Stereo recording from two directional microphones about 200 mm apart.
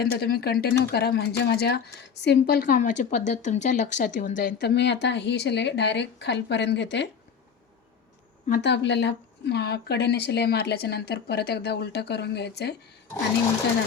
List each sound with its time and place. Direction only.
0.0 s a woman's voice: 50° left (ahead or behind)
8.4 s a woman's voice: 50° left (ahead or behind)